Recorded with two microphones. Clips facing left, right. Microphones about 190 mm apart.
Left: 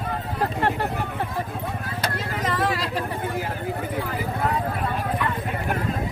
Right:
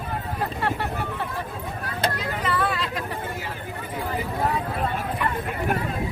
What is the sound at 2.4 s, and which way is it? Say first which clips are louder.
Vehicle: left 1 dB; 40° left (ahead or behind).